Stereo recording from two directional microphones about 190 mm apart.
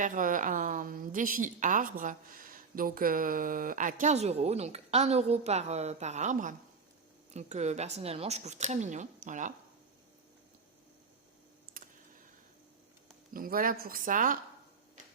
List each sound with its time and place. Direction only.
0.0 s a woman's voice: 45° right (ahead or behind)
11.8 s a sound: 45° right (ahead or behind)
13.3 s a woman's voice: 50° right (ahead or behind)